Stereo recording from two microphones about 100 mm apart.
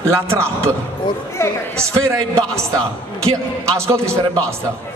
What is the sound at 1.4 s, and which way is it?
Speech, 25° left (ahead or behind).